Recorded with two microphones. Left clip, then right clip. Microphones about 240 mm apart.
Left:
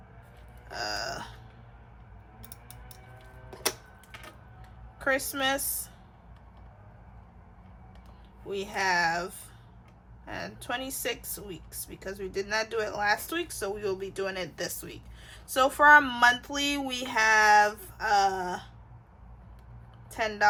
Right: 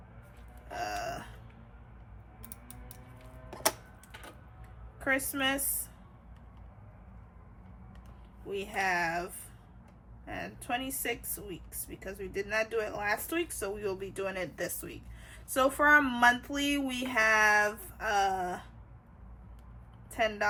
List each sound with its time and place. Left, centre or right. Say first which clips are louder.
0.8 s a sound: left 2 dB; centre
5.0 s speech: left 3 dB; centre
8.4 s speech: left 3 dB; centre
10.2 s speech: left 2 dB; centre
20.1 s speech: left 4 dB; centre